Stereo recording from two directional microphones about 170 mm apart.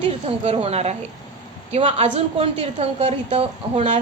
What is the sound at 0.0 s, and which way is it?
A woman's voice, 35° right (ahead or behind).